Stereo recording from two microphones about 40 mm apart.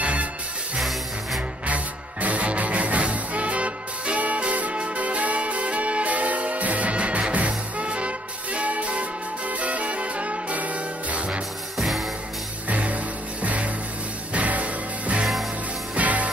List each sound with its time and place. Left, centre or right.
0.0 s music: right
1.7 s music: right
11.7 s music: centre
12.6 s music: right